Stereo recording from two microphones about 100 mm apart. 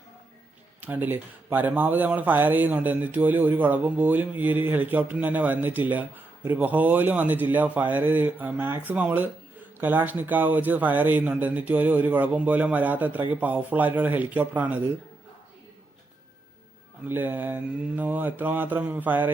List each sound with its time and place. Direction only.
0.8 s speech: 15° right (ahead or behind)
17.1 s mantra: 20° right (ahead or behind)